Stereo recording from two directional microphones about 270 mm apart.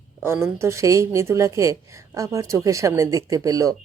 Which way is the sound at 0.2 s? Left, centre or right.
Centre.